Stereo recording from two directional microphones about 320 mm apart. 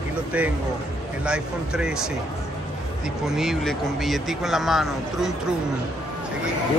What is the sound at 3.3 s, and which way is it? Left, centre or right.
Speech, centre.